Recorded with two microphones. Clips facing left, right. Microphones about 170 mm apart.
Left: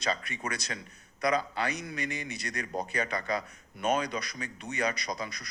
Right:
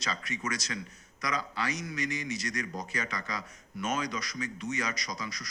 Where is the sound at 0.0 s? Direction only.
60° left (ahead or behind).